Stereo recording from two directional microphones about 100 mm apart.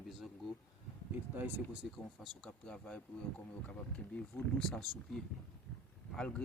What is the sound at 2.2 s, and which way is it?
Speech, 5° left (ahead or behind).